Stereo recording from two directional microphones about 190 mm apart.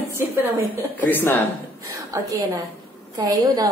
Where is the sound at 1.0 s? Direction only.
10° left (ahead or behind).